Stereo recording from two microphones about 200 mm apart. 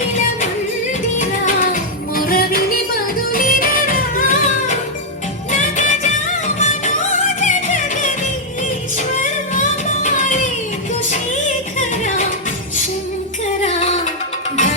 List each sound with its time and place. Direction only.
1.2 s music: 40° left (ahead or behind)
9.5 s music: 40° left (ahead or behind)
11.9 s music: 40° left (ahead or behind)
13.7 s music: 35° left (ahead or behind)